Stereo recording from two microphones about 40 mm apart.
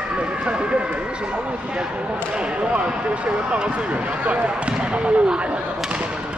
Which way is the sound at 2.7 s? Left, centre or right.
Right.